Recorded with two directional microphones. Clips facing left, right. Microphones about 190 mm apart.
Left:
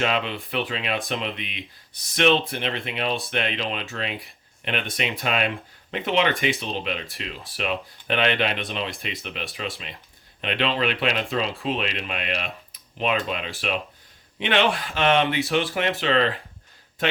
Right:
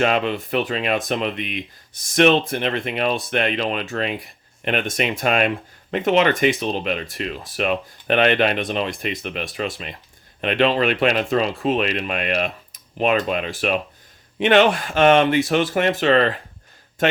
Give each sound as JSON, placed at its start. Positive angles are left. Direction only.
{"t": 0.0, "sound": "speech", "side_deg": -50}